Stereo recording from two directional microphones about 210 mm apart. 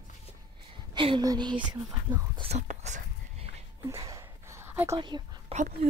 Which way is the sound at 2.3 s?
30° right (ahead or behind).